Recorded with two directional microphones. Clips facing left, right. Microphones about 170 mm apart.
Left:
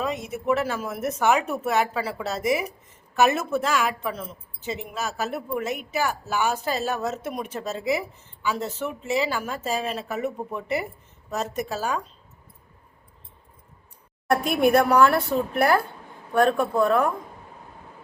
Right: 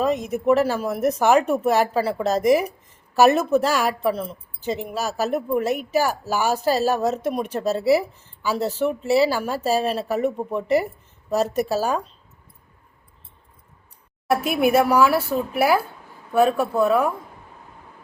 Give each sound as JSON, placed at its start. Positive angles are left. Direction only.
{"t": 0.4, "sound": "a woman's voice", "side_deg": -35}
{"t": 14.3, "sound": "speech", "side_deg": -5}